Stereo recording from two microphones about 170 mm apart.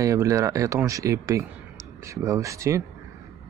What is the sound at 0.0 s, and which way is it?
Speech, 20° right (ahead or behind).